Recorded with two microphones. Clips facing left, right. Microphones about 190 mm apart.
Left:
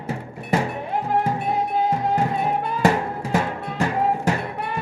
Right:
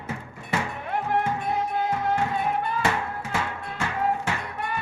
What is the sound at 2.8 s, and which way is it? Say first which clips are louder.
Music: left 7 dB; 40° left (ahead or behind).